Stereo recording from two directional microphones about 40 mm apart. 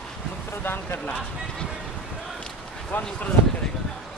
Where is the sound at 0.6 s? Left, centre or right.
Left.